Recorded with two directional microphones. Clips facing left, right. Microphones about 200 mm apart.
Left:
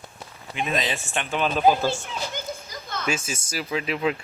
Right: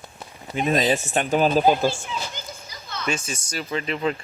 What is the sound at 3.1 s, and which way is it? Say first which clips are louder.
Speech: right 1 dB; 5° left (ahead or behind).